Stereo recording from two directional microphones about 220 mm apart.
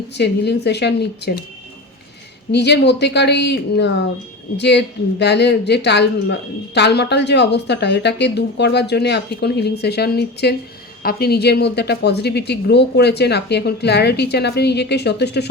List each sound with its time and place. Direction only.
0.1 s speech: 50° left (ahead or behind)
2.5 s speech: 50° left (ahead or behind)